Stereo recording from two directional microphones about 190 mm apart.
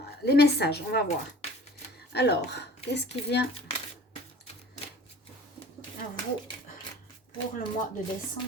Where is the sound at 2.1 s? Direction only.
60° left (ahead or behind).